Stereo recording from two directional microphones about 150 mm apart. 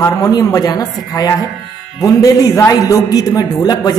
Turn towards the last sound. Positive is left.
turn(degrees=25)  # may be behind; listen again after turning